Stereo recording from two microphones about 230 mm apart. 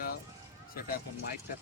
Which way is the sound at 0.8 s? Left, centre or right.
Left.